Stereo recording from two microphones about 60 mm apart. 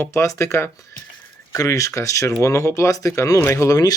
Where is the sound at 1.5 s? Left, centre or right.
Left.